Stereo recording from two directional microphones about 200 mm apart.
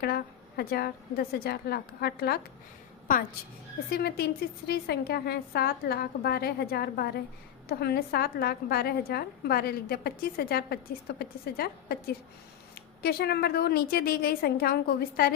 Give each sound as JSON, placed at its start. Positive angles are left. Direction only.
{"t": 0.0, "sound": "a woman's voice", "side_deg": 50}
{"t": 3.8, "sound": "a woman's voice", "side_deg": 50}